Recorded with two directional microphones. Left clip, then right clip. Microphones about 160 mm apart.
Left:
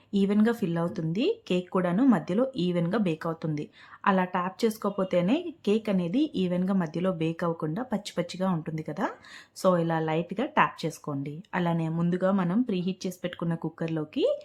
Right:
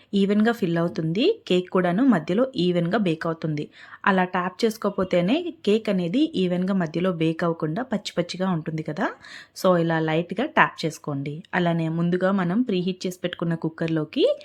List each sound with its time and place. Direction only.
0.1 s speech: 20° right (ahead or behind)